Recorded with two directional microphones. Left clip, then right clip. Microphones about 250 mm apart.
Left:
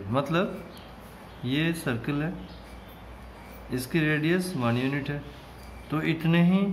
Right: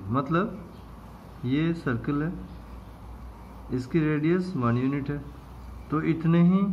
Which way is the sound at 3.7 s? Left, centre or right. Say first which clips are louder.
Even; left.